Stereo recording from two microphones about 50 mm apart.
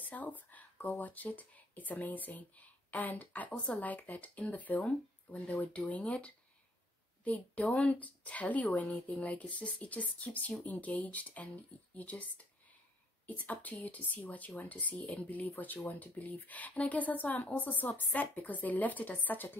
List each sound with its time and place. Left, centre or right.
0.0 s speech: left
7.2 s speech: left